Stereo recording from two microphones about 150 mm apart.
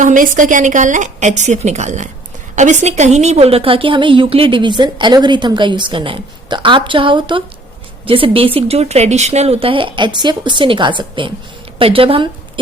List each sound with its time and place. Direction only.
0.0 s a woman's voice: 60° right (ahead or behind); by 12.3 s 35° right (ahead or behind)